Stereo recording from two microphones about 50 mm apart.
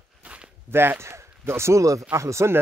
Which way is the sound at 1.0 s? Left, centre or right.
Right.